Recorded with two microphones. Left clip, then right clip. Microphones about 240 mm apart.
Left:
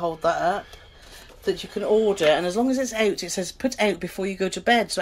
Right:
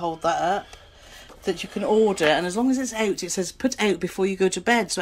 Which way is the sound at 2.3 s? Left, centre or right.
Centre.